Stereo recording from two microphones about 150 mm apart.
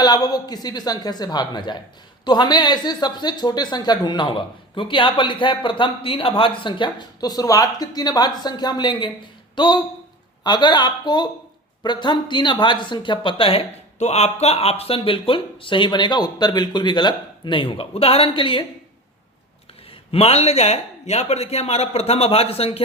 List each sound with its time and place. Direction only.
0.0 s speech: 25° left (ahead or behind)
20.1 s speech: 40° left (ahead or behind)